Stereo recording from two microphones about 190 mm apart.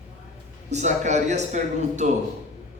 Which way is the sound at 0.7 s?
40° right (ahead or behind).